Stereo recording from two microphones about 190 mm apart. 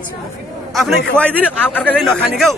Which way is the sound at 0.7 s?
5° left (ahead or behind).